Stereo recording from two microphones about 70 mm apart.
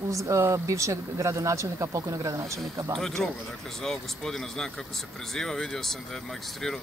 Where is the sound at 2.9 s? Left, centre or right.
Centre.